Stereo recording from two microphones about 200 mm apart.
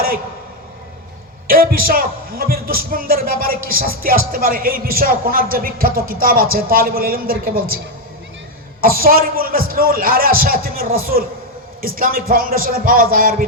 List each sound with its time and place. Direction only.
1.5 s a man's voice: 45° right (ahead or behind)
8.8 s a man's voice: 45° right (ahead or behind)